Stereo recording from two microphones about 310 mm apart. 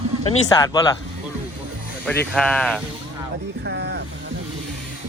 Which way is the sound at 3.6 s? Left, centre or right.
Right.